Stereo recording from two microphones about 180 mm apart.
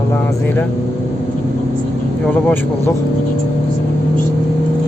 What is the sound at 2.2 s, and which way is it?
Speech, 10° left (ahead or behind).